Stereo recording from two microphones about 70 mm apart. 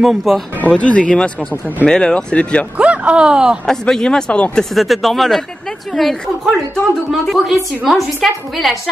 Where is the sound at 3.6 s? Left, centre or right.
Centre.